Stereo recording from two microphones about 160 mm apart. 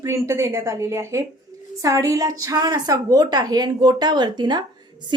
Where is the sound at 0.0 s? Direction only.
15° right (ahead or behind).